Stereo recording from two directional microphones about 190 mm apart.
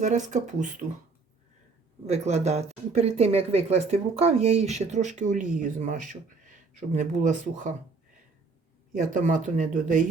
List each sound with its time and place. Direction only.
0.0 s speech: 40° right (ahead or behind)
2.0 s speech: 35° right (ahead or behind)
8.9 s speech: 40° right (ahead or behind)